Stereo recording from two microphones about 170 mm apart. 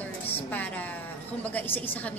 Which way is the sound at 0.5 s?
10° left (ahead or behind).